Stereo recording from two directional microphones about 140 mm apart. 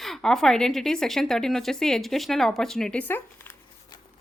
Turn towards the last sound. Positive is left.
turn(degrees=10)  # may be behind; listen again after turning